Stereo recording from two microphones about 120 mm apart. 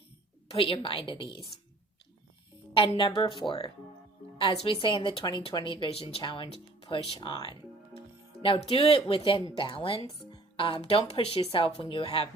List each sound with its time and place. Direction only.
0.5 s a woman's voice: 50° left (ahead or behind)
2.7 s a woman's voice: 45° left (ahead or behind)
10.3 s music: 45° left (ahead or behind)
10.8 s speech: 55° left (ahead or behind)
11.3 s a woman's voice: 45° left (ahead or behind)